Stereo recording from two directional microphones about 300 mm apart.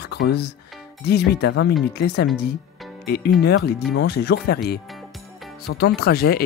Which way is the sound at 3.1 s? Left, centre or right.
Left.